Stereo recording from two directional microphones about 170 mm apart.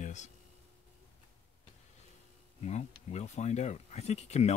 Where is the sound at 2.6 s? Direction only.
40° left (ahead or behind).